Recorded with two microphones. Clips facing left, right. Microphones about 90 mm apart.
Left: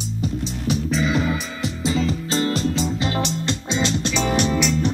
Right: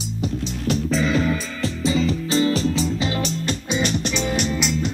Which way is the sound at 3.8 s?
40° left (ahead or behind).